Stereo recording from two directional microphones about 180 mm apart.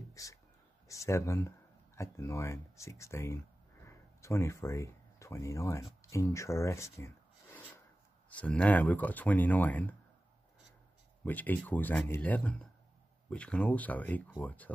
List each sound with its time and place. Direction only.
0.1 s a sound: 20° left (ahead or behind)
0.8 s speech: 15° left (ahead or behind)
8.3 s speech: 5° left (ahead or behind)
11.2 s speech: 10° left (ahead or behind)